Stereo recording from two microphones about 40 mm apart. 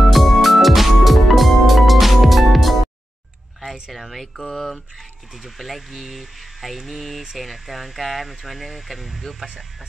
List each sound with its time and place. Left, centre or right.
0.0 s music: centre
3.9 s speech: centre
5.4 s speech: centre